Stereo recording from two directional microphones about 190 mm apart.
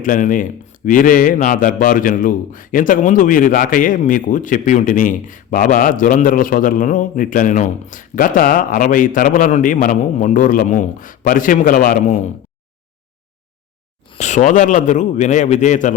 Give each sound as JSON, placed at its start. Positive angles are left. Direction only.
{"t": 0.0, "sound": "a man's voice", "side_deg": 45}
{"t": 14.2, "sound": "a man's voice", "side_deg": 40}